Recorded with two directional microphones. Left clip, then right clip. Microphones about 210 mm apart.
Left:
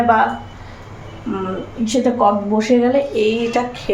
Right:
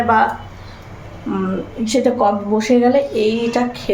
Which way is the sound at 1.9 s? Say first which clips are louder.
Even; 5° right (ahead or behind).